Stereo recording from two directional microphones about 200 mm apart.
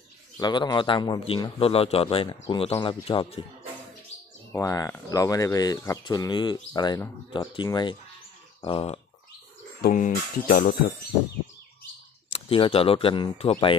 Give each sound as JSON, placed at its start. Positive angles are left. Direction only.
{"t": 0.4, "sound": "speech", "side_deg": 20}
{"t": 4.5, "sound": "speech", "side_deg": 15}
{"t": 9.8, "sound": "speech", "side_deg": 45}
{"t": 12.3, "sound": "speech", "side_deg": 30}